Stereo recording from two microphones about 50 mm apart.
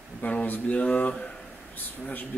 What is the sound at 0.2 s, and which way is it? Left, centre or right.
Speech, left.